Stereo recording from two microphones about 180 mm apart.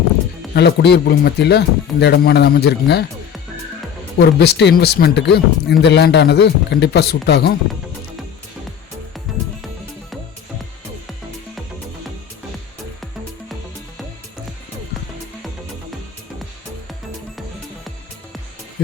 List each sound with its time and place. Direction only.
0.5 s speech: 65° left (ahead or behind)
4.2 s a man's voice: 65° left (ahead or behind)
9.3 s music: centre (ahead or behind)